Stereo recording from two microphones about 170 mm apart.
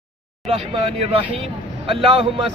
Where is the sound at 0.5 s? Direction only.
35° right (ahead or behind).